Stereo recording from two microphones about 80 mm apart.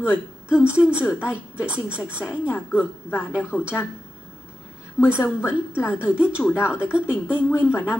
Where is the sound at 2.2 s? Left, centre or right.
Left.